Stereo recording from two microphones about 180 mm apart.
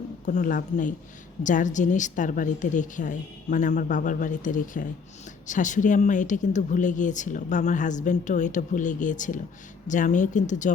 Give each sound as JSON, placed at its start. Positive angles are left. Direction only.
{"t": 0.3, "sound": "speech", "side_deg": 45}